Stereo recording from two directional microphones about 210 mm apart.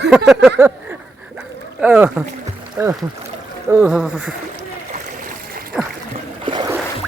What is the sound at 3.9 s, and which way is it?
Speech, 5° right (ahead or behind).